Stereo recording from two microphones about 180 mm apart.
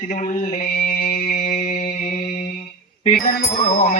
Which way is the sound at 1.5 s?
50° left (ahead or behind).